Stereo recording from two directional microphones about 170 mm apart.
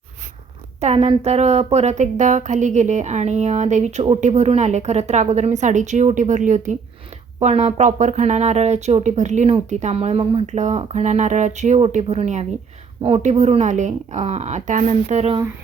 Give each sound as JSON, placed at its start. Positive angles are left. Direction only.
{"t": 0.8, "sound": "a woman's voice", "side_deg": -40}